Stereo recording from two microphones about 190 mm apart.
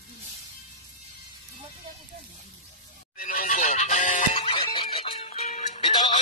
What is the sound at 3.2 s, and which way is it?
Music, 45° left (ahead or behind).